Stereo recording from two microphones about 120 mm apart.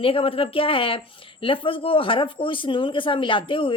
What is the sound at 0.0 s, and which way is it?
Speech, 50° left (ahead or behind).